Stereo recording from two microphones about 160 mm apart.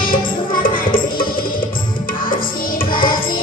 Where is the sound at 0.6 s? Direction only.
60° left (ahead or behind).